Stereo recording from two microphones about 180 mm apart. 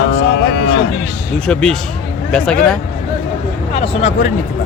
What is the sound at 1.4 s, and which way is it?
Speech, 5° left (ahead or behind).